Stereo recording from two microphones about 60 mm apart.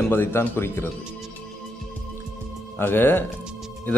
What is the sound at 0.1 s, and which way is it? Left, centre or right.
Speech, left.